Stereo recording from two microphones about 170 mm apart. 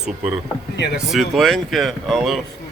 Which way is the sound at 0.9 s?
Centre (ahead or behind).